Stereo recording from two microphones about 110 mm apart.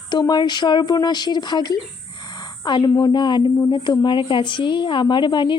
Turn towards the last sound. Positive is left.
turn(degrees=45)  # may be behind; listen again after turning